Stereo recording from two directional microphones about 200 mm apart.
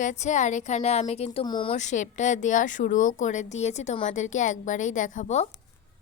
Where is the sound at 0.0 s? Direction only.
35° left (ahead or behind).